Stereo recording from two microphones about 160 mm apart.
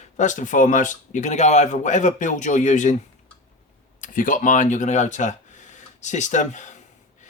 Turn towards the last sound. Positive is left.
turn(degrees=50)  # may be behind; listen again after turning